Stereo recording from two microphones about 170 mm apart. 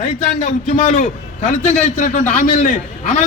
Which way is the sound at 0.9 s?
45° left (ahead or behind).